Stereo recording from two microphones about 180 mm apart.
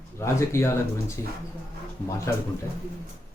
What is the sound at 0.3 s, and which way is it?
Speech, 15° left (ahead or behind).